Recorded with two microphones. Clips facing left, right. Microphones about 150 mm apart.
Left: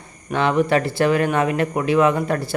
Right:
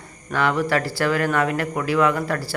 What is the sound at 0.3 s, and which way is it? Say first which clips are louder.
Speech: left 3 dB; 20° left (ahead or behind).